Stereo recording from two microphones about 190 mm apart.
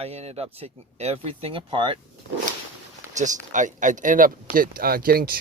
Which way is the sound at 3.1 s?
40° right (ahead or behind).